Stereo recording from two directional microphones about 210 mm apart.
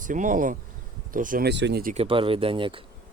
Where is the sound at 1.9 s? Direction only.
25° right (ahead or behind).